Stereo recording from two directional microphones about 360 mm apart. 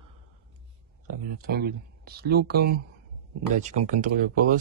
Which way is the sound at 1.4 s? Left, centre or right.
Right.